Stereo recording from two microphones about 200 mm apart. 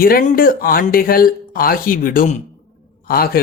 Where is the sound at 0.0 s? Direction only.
45° left (ahead or behind).